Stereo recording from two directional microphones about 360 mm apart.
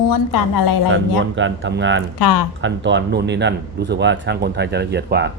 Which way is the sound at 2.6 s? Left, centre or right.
Right.